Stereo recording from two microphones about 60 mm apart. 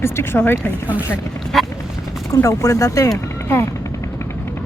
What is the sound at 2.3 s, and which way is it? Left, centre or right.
Speech, left.